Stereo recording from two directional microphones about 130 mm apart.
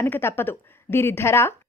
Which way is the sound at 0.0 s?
20° left (ahead or behind).